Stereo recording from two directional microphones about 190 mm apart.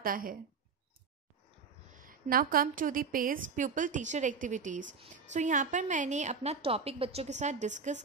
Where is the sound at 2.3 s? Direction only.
50° right (ahead or behind).